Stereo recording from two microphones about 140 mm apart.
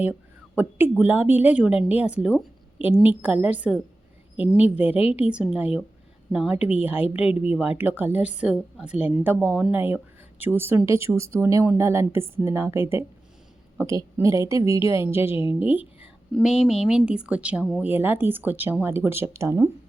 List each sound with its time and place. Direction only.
0.0 s a woman's voice: 10° right (ahead or behind)